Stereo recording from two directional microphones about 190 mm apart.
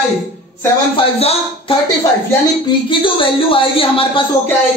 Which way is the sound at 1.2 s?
30° left (ahead or behind).